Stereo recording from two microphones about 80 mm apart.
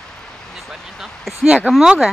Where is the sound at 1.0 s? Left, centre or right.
Centre.